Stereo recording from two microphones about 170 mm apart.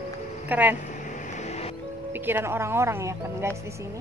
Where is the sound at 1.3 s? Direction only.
40° left (ahead or behind).